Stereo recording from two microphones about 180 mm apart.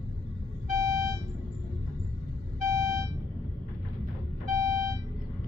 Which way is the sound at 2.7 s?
15° right (ahead or behind).